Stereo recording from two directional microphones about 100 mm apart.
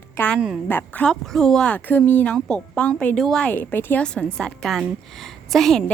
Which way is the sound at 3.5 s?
15° left (ahead or behind).